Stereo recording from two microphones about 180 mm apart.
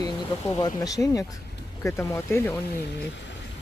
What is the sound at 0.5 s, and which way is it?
Speech, 20° left (ahead or behind).